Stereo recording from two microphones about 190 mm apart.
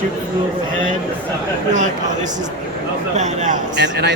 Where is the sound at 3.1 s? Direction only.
40° right (ahead or behind).